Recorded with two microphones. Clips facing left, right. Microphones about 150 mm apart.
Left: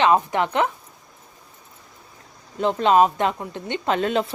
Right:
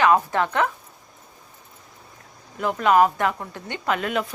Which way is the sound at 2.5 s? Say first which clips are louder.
Left 1 dB; 25° left (ahead or behind).